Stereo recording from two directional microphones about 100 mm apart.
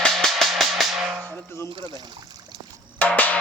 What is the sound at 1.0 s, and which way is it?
Music, 10° right (ahead or behind).